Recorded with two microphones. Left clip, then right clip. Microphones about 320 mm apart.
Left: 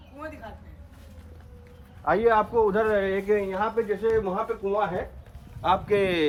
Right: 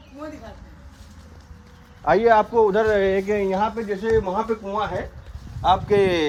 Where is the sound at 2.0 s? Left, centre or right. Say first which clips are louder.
Right 5 dB; right.